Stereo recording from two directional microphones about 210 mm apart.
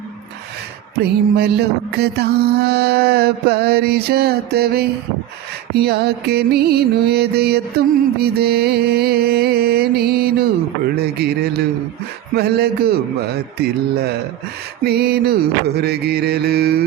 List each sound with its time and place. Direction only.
0.9 s mantra: 50° right (ahead or behind)